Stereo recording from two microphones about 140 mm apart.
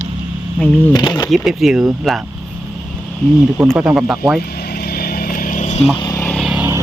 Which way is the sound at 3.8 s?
5° right (ahead or behind).